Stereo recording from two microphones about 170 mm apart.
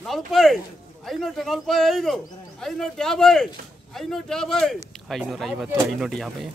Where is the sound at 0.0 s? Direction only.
Centre (ahead or behind).